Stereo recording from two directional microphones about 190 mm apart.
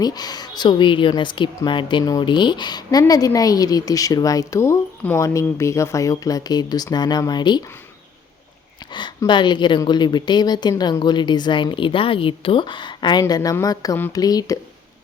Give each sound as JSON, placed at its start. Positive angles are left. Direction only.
{"t": 0.0, "sound": "speech", "side_deg": 20}
{"t": 8.9, "sound": "speech", "side_deg": 25}